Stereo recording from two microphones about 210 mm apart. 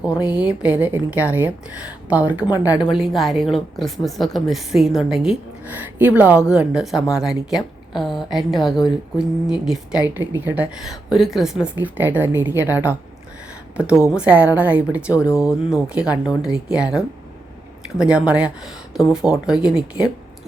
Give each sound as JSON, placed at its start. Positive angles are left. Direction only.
{"t": 0.2, "sound": "a woman's voice", "side_deg": -5}